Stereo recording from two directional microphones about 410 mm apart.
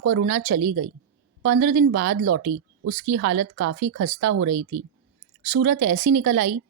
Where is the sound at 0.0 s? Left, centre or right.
Right.